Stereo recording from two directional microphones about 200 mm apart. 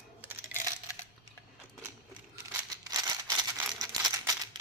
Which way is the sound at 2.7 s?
20° right (ahead or behind).